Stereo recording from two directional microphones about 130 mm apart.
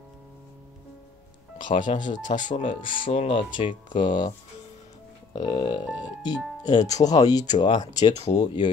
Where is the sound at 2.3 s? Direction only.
75° left (ahead or behind).